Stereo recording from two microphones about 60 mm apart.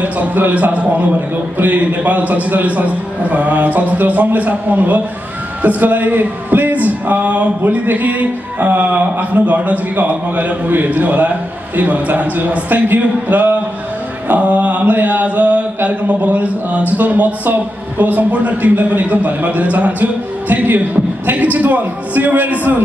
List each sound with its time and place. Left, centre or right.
0.0 s speech: right